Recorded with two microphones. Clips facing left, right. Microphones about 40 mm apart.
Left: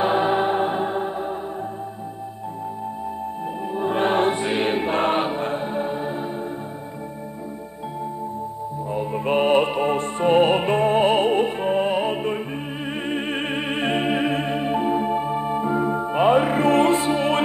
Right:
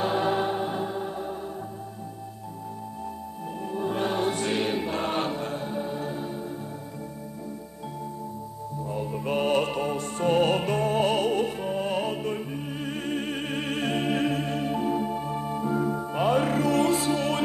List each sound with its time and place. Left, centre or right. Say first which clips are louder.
0.0 s music: left 5 dB; left
3.7 s choir: left 7 dB; left
4.4 s choir: left 5 dB; left
5.2 s music: left 6 dB; left
8.9 s music: left 7 dB; left
12.8 s opera: left 4 dB; left
16.6 s music: left 6 dB; left